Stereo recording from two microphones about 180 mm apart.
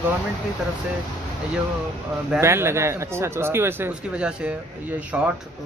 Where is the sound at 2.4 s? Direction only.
15° right (ahead or behind).